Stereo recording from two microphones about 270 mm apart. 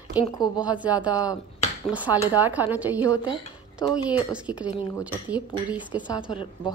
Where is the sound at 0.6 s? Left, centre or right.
Centre.